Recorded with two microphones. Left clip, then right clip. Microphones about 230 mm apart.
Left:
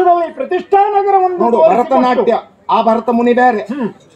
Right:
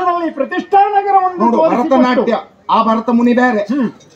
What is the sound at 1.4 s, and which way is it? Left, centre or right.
Speech, left.